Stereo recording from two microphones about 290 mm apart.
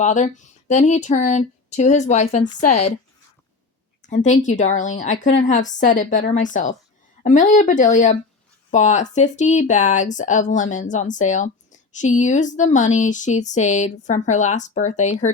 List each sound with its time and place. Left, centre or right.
0.0 s speech: left
4.0 s speech: left